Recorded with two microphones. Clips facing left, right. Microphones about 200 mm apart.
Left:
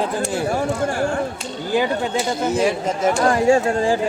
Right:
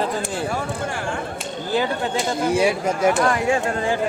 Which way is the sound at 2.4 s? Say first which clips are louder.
Right 1 dB; 10° right (ahead or behind).